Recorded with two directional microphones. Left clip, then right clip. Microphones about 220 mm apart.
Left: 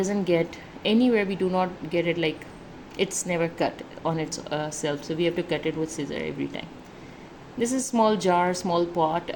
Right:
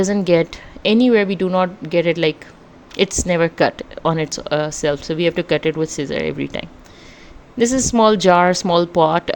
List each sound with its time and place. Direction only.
0.0 s speech: 40° right (ahead or behind)